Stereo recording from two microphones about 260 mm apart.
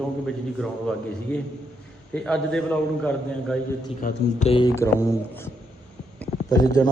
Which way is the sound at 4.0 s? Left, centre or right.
Left.